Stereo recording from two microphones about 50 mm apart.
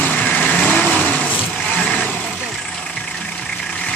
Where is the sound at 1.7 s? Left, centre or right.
Left.